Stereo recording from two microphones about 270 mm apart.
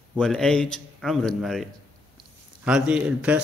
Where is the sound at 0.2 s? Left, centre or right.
Centre.